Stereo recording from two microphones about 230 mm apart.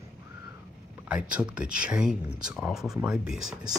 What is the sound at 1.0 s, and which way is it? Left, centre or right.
Speech, centre.